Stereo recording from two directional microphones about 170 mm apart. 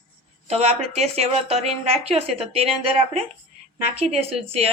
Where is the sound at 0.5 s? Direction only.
40° right (ahead or behind).